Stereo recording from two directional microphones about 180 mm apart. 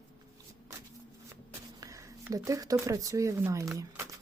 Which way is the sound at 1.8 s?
15° right (ahead or behind).